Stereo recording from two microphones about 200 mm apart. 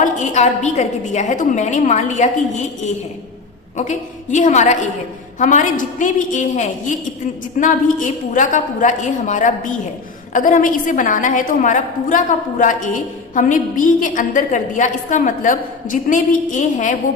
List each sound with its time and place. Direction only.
0.0 s a woman's voice: 35° left (ahead or behind)